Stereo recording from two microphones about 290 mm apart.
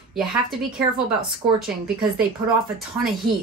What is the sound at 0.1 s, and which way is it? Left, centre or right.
Speech, centre.